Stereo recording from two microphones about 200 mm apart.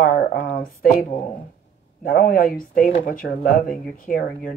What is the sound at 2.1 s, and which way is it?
Speech, 45° left (ahead or behind).